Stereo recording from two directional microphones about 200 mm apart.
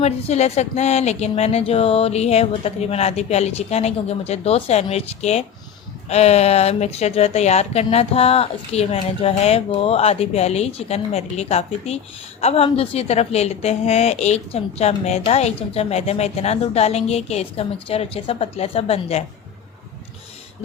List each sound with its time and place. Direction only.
0.0 s a woman's voice: 35° left (ahead or behind)